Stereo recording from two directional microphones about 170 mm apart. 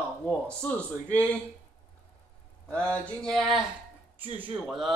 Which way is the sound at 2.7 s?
10° left (ahead or behind).